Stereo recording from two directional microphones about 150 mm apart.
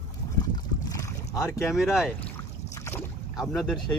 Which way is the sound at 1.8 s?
Centre (ahead or behind).